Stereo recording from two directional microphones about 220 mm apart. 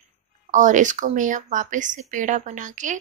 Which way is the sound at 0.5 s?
35° right (ahead or behind).